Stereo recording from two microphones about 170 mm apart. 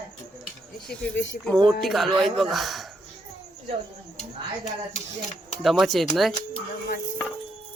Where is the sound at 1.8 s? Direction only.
Centre (ahead or behind).